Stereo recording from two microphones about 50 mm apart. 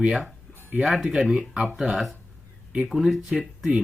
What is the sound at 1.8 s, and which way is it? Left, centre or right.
Speech, centre.